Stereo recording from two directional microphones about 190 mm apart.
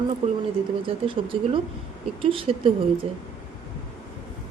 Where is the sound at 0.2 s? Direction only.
30° right (ahead or behind).